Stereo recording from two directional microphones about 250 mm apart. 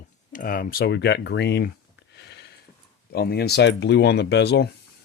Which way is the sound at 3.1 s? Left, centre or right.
Left.